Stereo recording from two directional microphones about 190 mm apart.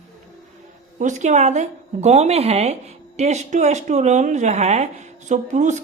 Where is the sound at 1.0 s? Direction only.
40° right (ahead or behind).